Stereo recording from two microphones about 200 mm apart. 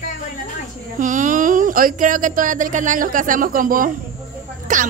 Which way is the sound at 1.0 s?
40° right (ahead or behind).